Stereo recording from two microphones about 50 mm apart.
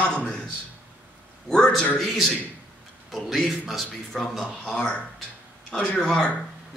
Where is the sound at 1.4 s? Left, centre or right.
Centre.